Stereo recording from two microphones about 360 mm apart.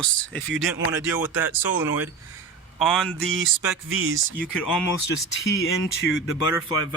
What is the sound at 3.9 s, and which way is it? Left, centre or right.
Speech, right.